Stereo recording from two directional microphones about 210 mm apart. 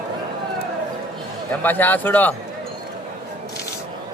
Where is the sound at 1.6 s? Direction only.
10° left (ahead or behind).